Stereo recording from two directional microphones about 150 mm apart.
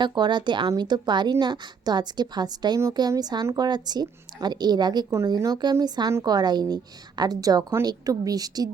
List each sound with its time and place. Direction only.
0.0 s a woman's voice: 30° right (ahead or behind)